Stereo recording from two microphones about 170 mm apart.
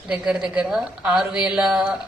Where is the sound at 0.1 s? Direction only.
5° right (ahead or behind).